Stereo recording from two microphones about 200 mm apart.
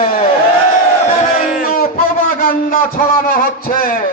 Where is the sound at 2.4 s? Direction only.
45° left (ahead or behind).